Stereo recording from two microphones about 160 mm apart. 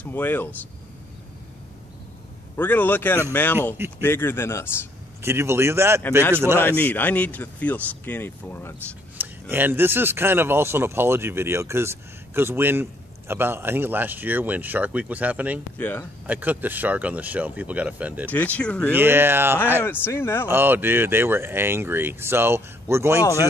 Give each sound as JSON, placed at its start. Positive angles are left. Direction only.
{"t": 0.0, "sound": "speech", "side_deg": 10}
{"t": 2.5, "sound": "speech", "side_deg": 10}
{"t": 5.2, "sound": "speech", "side_deg": -15}
{"t": 6.6, "sound": "speech", "side_deg": 10}
{"t": 9.2, "sound": "speech", "side_deg": -10}
{"t": 15.8, "sound": "speech", "side_deg": 10}
{"t": 16.3, "sound": "speech", "side_deg": -10}
{"t": 18.3, "sound": "speech", "side_deg": 10}
{"t": 18.9, "sound": "speech", "side_deg": -15}
{"t": 20.1, "sound": "speech", "side_deg": 15}
{"t": 20.4, "sound": "speech", "side_deg": -15}